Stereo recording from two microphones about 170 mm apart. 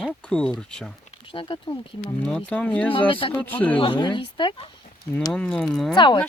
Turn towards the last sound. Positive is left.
turn(degrees=25)  # may be behind; listen again after turning